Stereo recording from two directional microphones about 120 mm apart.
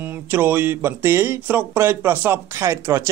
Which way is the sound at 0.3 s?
15° right (ahead or behind).